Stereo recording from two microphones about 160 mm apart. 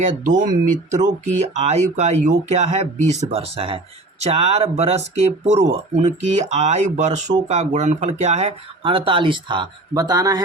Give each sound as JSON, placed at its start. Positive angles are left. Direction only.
{"t": 0.0, "sound": "speech", "side_deg": -55}